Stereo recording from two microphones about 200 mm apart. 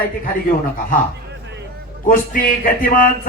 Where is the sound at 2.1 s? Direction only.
45° left (ahead or behind).